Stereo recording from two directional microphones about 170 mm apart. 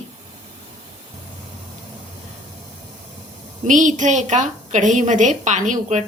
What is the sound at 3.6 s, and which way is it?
A woman's voice, 45° right (ahead or behind).